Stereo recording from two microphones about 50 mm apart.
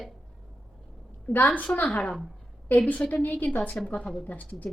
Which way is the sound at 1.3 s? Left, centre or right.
Left.